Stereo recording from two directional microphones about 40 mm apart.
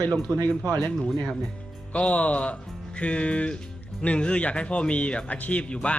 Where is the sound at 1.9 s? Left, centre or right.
Left.